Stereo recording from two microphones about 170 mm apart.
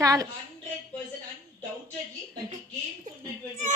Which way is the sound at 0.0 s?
20° right (ahead or behind).